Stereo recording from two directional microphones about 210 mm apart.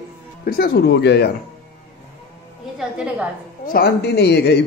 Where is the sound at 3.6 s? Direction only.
45° left (ahead or behind).